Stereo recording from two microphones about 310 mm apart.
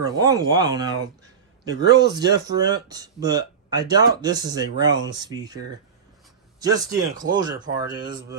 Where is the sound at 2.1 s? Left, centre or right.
Centre.